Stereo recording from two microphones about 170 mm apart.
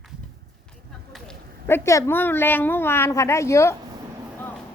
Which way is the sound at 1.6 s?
15° left (ahead or behind).